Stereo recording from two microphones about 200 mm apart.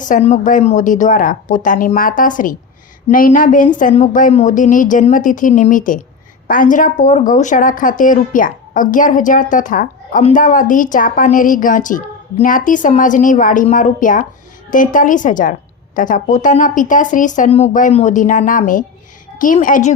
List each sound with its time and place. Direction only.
0.0 s a woman's voice: 35° left (ahead or behind)